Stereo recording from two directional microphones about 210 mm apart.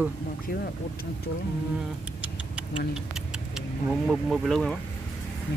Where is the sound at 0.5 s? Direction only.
45° left (ahead or behind).